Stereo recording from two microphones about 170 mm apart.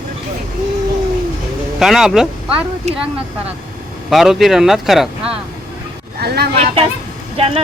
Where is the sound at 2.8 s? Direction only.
40° right (ahead or behind).